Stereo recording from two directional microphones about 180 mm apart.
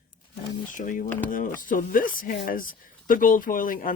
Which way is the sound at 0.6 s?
45° left (ahead or behind).